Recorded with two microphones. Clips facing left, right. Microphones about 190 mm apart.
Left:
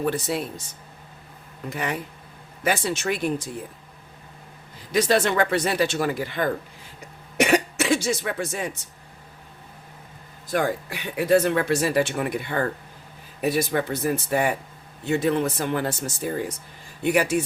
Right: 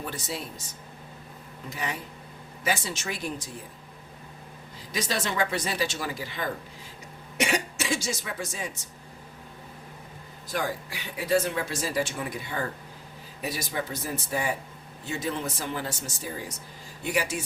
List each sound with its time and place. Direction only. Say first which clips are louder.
0.0 s speech: left 10 dB; 60° left (ahead or behind)
1.7 s speech: left 6 dB; 60° left (ahead or behind)
4.9 s speech: left 10 dB; 60° left (ahead or behind)
10.5 s speech: left 7 dB; 55° left (ahead or behind)